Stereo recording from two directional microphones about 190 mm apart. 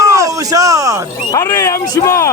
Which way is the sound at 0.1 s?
15° right (ahead or behind).